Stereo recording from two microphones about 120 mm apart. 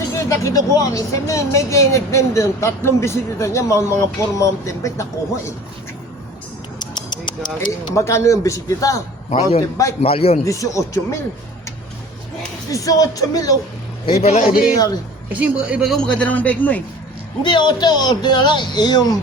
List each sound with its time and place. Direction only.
0.2 s speech: 25° left (ahead or behind)
6.9 s a sound: 40° left (ahead or behind)
7.9 s speech: 25° left (ahead or behind)
10.0 s a man's voice: 55° left (ahead or behind)
10.4 s speech: 25° left (ahead or behind)
12.7 s speech: 30° left (ahead or behind)
14.2 s a man's voice: 60° left (ahead or behind)
15.3 s speech: 10° right (ahead or behind)
15.9 s a man's voice: 5° left (ahead or behind)
17.4 s speech: 40° left (ahead or behind)